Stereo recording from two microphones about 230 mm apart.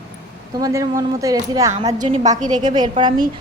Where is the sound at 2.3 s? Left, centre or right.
Right.